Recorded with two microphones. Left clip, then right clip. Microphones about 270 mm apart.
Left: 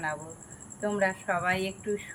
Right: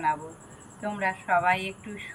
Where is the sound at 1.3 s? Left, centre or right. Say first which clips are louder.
Right 5 dB; centre.